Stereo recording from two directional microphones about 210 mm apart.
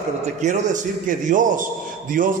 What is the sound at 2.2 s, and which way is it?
Speech, 40° right (ahead or behind).